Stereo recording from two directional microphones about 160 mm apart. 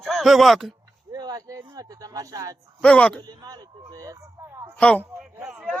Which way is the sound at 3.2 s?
25° right (ahead or behind).